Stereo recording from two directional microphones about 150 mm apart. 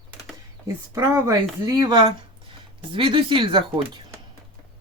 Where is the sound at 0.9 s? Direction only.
20° right (ahead or behind).